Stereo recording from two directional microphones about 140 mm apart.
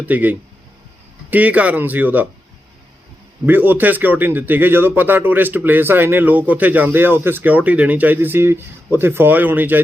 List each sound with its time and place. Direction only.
0.0 s speech: 10° right (ahead or behind)
3.4 s speech: 15° right (ahead or behind)